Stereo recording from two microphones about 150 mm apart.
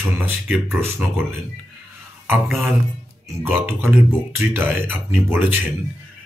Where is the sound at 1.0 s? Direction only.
10° right (ahead or behind).